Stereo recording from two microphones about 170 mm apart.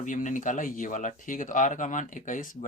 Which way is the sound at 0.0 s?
45° left (ahead or behind).